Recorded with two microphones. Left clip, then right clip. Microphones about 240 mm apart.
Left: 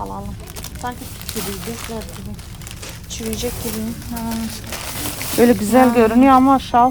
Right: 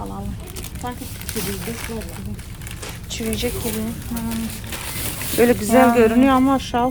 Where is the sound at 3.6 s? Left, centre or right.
Left.